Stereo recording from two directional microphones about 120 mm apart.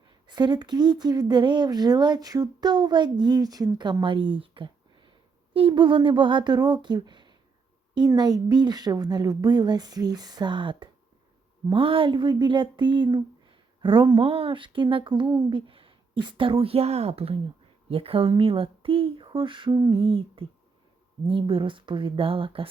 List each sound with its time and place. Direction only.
0.1 s speech: 35° right (ahead or behind)
20.0 s speech: 50° right (ahead or behind)